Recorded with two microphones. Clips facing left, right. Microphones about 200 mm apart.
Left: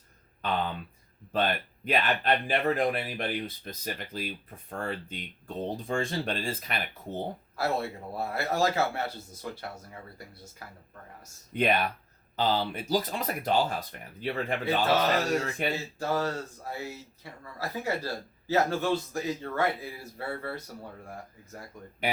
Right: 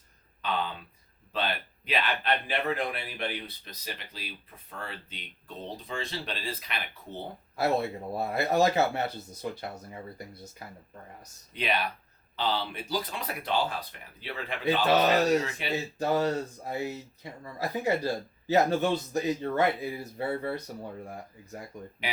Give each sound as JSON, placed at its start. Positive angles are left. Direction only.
{"t": 0.4, "sound": "a sound", "side_deg": 50}
{"t": 1.3, "sound": "speech", "side_deg": 45}
{"t": 7.5, "sound": "speech", "side_deg": -20}
{"t": 11.5, "sound": "speech", "side_deg": 50}
{"t": 14.6, "sound": "speech", "side_deg": -15}
{"t": 15.6, "sound": "speech", "side_deg": 50}
{"t": 16.0, "sound": "speech", "side_deg": -20}